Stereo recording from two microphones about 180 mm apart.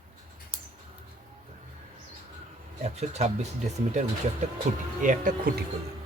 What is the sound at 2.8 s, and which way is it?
Speech, 35° right (ahead or behind).